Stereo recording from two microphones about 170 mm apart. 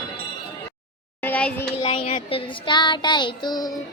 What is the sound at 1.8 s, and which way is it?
Child singing, 35° left (ahead or behind).